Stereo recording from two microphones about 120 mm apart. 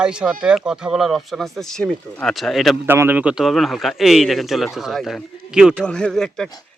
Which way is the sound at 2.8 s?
20° right (ahead or behind).